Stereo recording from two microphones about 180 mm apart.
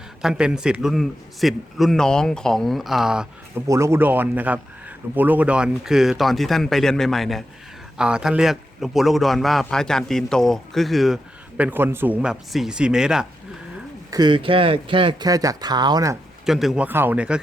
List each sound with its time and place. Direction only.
0.2 s a man's voice: 5° right (ahead or behind)
3.7 s a man's voice: 15° right (ahead or behind)
14.1 s speech: 25° right (ahead or behind)
16.5 s speech: centre (ahead or behind)